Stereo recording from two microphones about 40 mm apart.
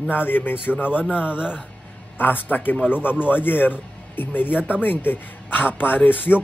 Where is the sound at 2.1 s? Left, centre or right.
Left.